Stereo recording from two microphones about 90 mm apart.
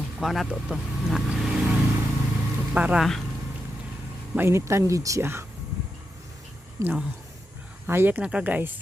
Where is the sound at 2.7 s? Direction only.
15° right (ahead or behind).